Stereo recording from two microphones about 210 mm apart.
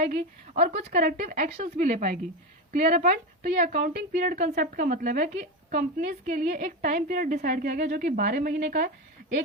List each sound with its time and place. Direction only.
0.2 s a woman's voice: 30° right (ahead or behind)
0.9 s a woman's voice: 45° right (ahead or behind)
1.2 s a woman's voice: 35° right (ahead or behind)